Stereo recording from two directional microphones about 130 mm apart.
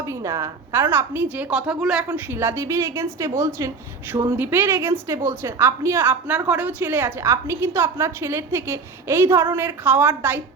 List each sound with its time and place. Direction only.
0.0 s a woman's voice: 25° right (ahead or behind)